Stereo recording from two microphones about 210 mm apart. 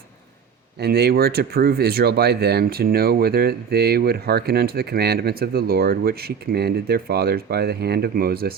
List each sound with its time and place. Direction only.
0.8 s speech: 50° right (ahead or behind)